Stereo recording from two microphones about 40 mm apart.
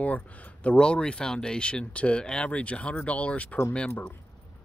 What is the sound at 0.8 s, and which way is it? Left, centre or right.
Speech, left.